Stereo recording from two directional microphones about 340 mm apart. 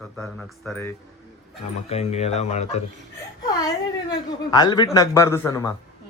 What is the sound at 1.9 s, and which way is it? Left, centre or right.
Speech, centre.